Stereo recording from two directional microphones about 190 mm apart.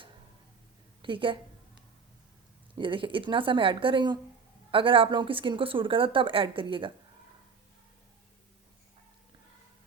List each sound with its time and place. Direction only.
1.0 s a woman's voice: 25° right (ahead or behind)
2.7 s a woman's voice: 25° right (ahead or behind)